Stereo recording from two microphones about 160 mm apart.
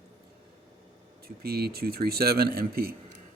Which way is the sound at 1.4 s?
75° right (ahead or behind).